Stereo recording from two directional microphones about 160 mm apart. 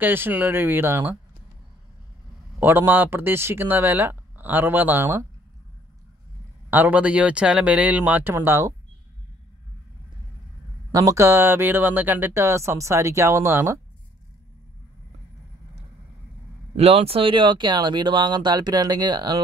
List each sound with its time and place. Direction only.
0.0 s speech: 10° right (ahead or behind)
2.6 s speech: 10° right (ahead or behind)
6.7 s speech: 10° right (ahead or behind)
10.9 s speech: 20° right (ahead or behind)
16.7 s speech: 40° right (ahead or behind)